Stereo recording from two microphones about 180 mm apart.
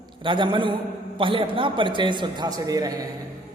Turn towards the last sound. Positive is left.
turn(degrees=-20)  # may be behind; listen again after turning